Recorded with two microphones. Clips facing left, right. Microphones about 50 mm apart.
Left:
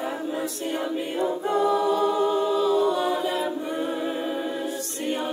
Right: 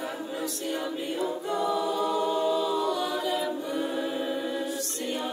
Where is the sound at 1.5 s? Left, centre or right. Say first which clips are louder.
Left 6 dB; centre.